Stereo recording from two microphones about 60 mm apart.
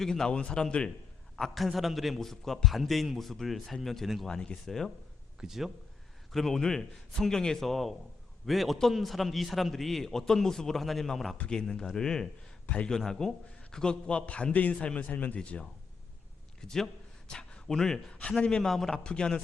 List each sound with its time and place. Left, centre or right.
0.0 s a man's voice: centre
1.4 s a man's voice: centre
4.3 s a man's voice: centre
5.4 s a man's voice: centre
6.3 s a man's voice: centre
11.3 s a man's voice: centre
12.6 s a man's voice: centre
13.0 s a man's voice: centre; by 15.4 s left
15.4 s a man's voice: centre
16.6 s a sound: centre
18.1 s a man's voice: centre